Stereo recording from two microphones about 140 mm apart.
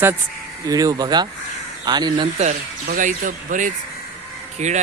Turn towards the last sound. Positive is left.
turn(degrees=-55)  # may be behind; listen again after turning